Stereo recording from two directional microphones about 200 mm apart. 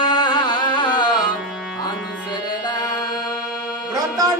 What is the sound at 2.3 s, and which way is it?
Music, 20° left (ahead or behind).